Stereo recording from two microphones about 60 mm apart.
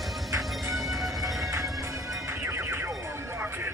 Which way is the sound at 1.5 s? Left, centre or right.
Right.